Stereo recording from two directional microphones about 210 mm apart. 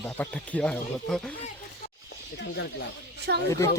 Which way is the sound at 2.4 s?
55° left (ahead or behind).